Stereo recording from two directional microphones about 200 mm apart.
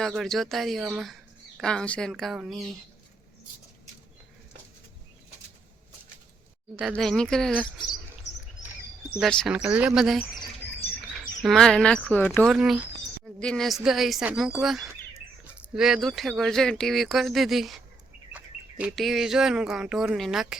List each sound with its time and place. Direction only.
0.0 s speech: centre (ahead or behind)
6.9 s speech: centre (ahead or behind)
8.3 s bird: 60° left (ahead or behind)
9.1 s speech: centre (ahead or behind)
11.4 s speech: centre (ahead or behind)